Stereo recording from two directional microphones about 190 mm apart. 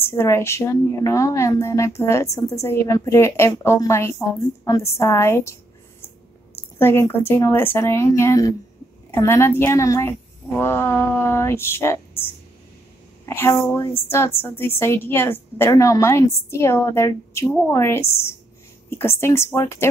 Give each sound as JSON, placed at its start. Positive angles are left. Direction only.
{"t": 0.0, "sound": "a woman's voice", "side_deg": 15}